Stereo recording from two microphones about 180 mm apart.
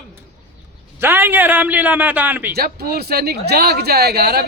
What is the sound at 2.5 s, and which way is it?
Speech, 60° right (ahead or behind).